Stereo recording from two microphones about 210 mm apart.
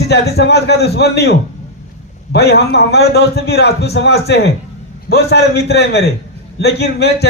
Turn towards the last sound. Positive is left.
turn(degrees=50)  # may be behind; listen again after turning